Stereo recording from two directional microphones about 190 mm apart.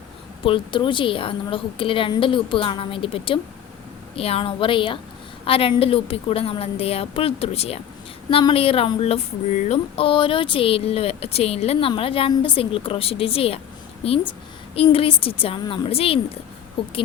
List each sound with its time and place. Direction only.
0.4 s a woman's voice: 25° left (ahead or behind)
14.8 s speech: 30° left (ahead or behind)